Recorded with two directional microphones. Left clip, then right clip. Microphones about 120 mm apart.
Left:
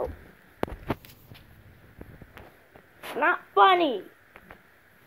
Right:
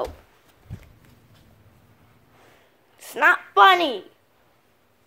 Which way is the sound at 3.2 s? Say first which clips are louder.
Right 5 dB; 90° right.